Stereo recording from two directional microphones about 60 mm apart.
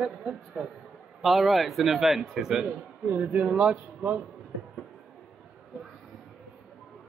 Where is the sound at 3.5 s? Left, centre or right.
Centre.